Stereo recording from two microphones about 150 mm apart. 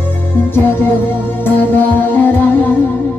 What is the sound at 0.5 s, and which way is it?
Music, 15° left (ahead or behind).